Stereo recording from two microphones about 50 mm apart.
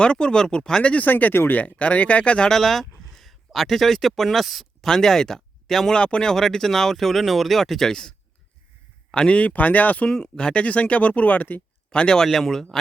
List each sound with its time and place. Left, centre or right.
0.0 s speech: centre
1.0 s speech: left
1.5 s speech: left
2.5 s speech: centre
4.9 s speech: centre
6.0 s speech: centre
9.1 s speech: left
10.1 s speech: centre; by 11.6 s left
11.9 s speech: centre